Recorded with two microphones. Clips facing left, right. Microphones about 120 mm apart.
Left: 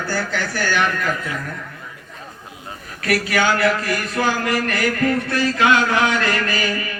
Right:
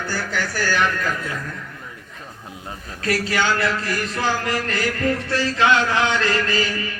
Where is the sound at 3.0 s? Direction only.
30° right (ahead or behind).